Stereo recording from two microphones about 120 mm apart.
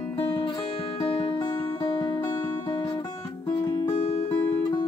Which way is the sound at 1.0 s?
40° left (ahead or behind).